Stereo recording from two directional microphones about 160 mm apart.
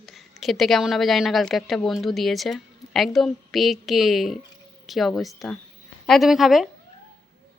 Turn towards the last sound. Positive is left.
turn(degrees=0)  # may be behind; listen again after turning